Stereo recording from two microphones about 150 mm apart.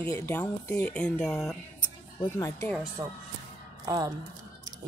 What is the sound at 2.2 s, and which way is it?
Speech, 15° left (ahead or behind).